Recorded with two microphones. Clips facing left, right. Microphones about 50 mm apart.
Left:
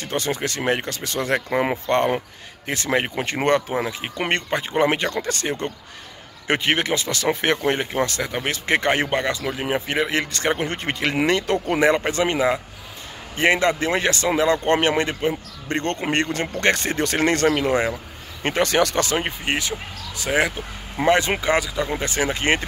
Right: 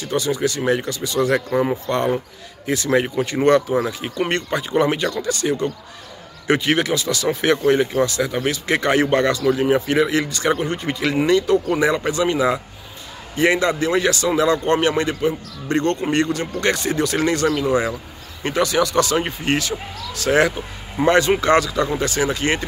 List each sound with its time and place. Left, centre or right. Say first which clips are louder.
0.0 s speech: right 4 dB; left
3.7 s speech: right 4 dB; left
9.1 s speech: right 6 dB; centre
10.6 s speech: right 2 dB; left
18.9 s speech: right 4 dB; left
19.2 s speech: right 3 dB; centre
22.0 s speech: right 2 dB; left